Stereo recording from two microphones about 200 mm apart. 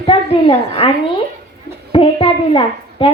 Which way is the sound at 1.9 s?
25° left (ahead or behind).